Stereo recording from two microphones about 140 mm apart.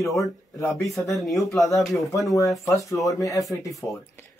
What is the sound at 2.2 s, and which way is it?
A man's voice, 25° left (ahead or behind).